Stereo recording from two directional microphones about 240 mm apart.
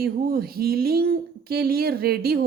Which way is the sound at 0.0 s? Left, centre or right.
Right.